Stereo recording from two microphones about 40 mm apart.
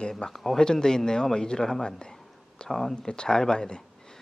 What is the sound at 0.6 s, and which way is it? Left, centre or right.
Speech, centre.